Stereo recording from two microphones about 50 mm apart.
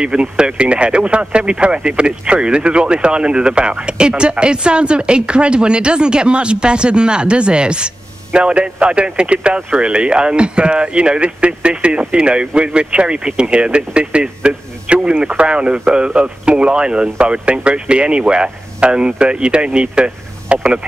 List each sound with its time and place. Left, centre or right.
0.0 s speech: centre